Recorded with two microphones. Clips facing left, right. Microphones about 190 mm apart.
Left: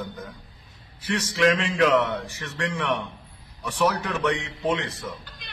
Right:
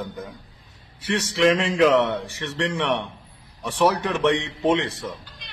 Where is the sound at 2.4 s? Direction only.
25° right (ahead or behind).